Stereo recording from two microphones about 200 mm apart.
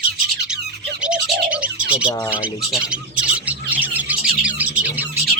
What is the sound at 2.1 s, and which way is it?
Speech, 15° left (ahead or behind).